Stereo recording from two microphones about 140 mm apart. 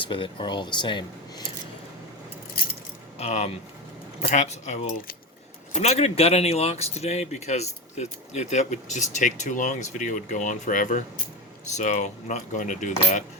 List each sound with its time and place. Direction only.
0.0 s speech: 35° left (ahead or behind)
3.2 s speech: 50° left (ahead or behind)